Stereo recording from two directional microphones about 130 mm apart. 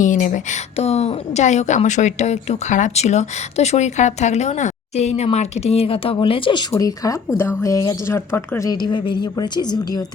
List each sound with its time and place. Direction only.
0.0 s a woman's voice: 80° left; by 10.1 s 30° left (ahead or behind)